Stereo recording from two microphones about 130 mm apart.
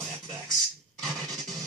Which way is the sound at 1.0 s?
Centre (ahead or behind).